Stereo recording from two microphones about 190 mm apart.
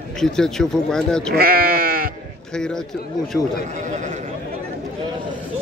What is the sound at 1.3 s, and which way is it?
Speech, 50° right (ahead or behind).